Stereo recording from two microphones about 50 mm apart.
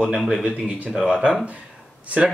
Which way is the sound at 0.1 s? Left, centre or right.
Centre.